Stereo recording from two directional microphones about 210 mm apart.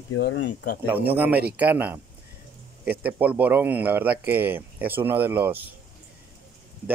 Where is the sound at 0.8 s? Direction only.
10° right (ahead or behind).